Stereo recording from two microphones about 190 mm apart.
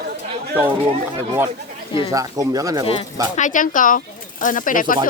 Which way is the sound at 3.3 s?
40° left (ahead or behind).